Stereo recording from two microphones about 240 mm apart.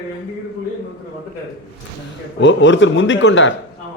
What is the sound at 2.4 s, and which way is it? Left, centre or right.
A man's voice, left.